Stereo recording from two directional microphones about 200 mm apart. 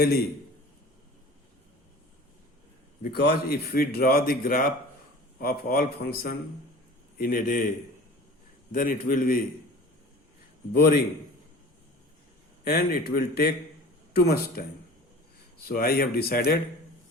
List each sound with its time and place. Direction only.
0.0 s a man's voice: 50° left (ahead or behind)
3.0 s a man's voice: 55° left (ahead or behind)
8.7 s a man's voice: 45° left (ahead or behind)
10.8 s a man's voice: 50° left (ahead or behind)
12.6 s a man's voice: 55° left (ahead or behind)
15.6 s a man's voice: 50° left (ahead or behind)